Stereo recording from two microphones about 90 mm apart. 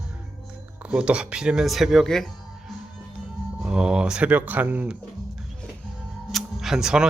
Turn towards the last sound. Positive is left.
turn(degrees=-5)  # may be behind; listen again after turning